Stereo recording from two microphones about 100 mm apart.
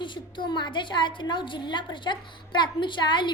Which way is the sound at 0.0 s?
55° left (ahead or behind).